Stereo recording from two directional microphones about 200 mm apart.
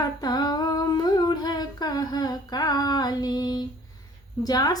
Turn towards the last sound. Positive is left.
turn(degrees=20)  # may be behind; listen again after turning